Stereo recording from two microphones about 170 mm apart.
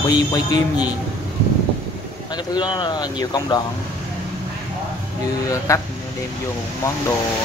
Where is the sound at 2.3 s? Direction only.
25° left (ahead or behind).